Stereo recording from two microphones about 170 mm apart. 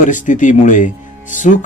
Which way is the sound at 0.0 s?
50° left (ahead or behind).